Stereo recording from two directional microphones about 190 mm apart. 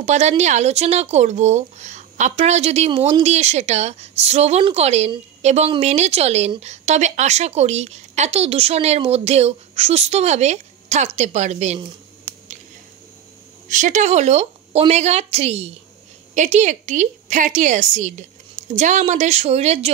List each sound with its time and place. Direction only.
0.0 s speech: 35° right (ahead or behind)
13.7 s speech: 40° right (ahead or behind)